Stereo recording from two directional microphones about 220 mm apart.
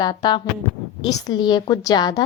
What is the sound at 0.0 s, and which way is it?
A woman's voice, 20° left (ahead or behind).